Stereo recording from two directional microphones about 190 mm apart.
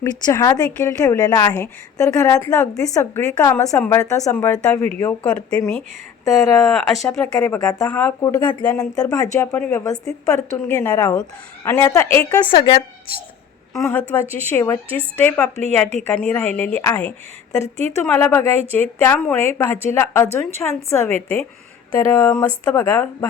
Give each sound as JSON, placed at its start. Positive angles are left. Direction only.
{"t": 0.0, "sound": "a woman's voice", "side_deg": 20}
{"t": 6.2, "sound": "a woman's voice", "side_deg": 15}
{"t": 6.6, "sound": "speech", "side_deg": 0}
{"t": 7.0, "sound": "a woman's voice", "side_deg": 15}
{"t": 12.5, "sound": "a woman's voice", "side_deg": 25}
{"t": 14.3, "sound": "a woman's voice", "side_deg": -30}
{"t": 14.5, "sound": "a woman's voice", "side_deg": 15}
{"t": 17.6, "sound": "a woman's voice", "side_deg": -35}
{"t": 18.0, "sound": "a woman's voice", "side_deg": 10}